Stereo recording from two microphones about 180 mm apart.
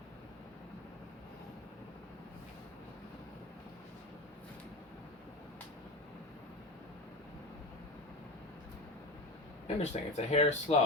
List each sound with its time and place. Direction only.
9.6 s speech: 35° left (ahead or behind)